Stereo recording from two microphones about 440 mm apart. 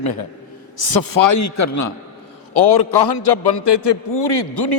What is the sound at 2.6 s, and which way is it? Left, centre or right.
A man's voice, left.